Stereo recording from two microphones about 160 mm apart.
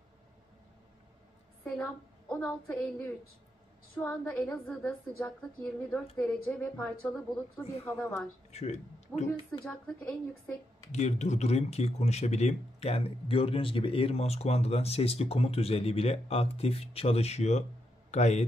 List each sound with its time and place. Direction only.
1.6 s a woman's voice: 5° left (ahead or behind)
8.5 s speech: 45° left (ahead or behind)
9.5 s speech: 5° left (ahead or behind)
10.9 s a man's voice: 45° left (ahead or behind)